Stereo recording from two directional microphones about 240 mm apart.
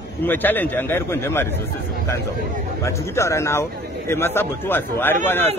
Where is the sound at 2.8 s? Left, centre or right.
Centre.